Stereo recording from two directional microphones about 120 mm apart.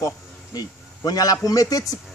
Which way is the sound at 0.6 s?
30° left (ahead or behind).